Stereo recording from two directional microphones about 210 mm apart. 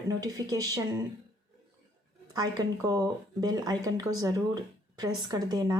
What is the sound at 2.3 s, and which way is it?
A woman's voice, 20° right (ahead or behind).